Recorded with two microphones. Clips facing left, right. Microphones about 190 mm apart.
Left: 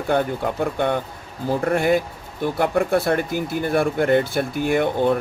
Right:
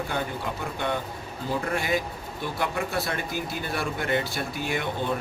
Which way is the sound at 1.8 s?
55° left (ahead or behind).